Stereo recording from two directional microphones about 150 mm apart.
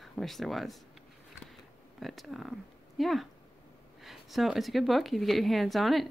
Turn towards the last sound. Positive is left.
turn(degrees=0)  # may be behind; listen again after turning